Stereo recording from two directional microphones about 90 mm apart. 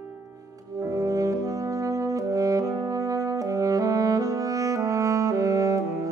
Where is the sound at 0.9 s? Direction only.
40° right (ahead or behind).